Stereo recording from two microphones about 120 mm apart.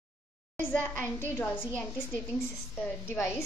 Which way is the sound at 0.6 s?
15° left (ahead or behind).